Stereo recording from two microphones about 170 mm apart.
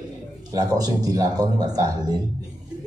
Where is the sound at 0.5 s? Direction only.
20° right (ahead or behind).